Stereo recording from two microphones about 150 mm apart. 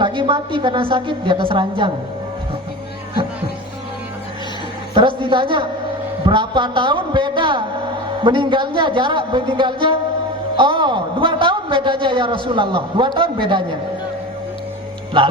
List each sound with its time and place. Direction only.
0.0 s a man's voice: 35° right (ahead or behind)
4.9 s a man's voice: 35° right (ahead or behind)